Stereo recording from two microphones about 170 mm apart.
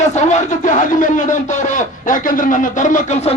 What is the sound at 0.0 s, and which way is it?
Speech, 45° left (ahead or behind).